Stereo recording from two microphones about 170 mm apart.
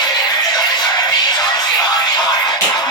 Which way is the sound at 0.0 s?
25° left (ahead or behind).